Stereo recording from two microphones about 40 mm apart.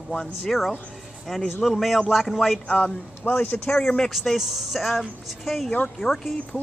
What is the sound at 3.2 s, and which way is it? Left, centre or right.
Speech, left.